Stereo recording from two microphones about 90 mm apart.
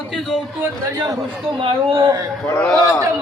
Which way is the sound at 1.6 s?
70° right (ahead or behind).